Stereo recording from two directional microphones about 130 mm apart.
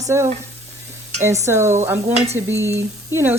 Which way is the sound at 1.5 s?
20° right (ahead or behind).